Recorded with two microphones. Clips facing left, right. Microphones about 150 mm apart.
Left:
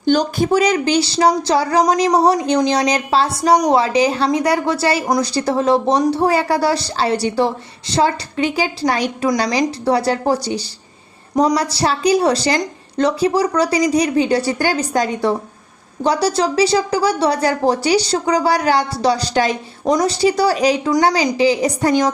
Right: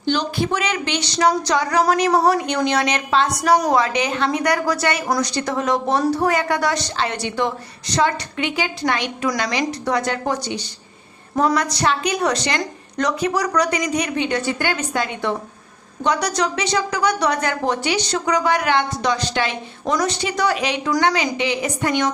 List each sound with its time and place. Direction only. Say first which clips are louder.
0.0 s speech: left 5 dB; 45° left (ahead or behind)